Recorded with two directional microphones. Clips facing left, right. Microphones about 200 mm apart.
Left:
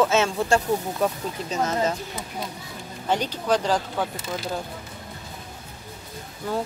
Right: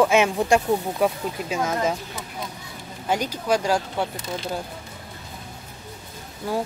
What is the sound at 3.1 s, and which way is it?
Speech, 10° right (ahead or behind).